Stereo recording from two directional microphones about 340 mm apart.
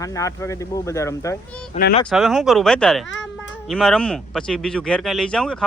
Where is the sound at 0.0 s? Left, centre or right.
Centre.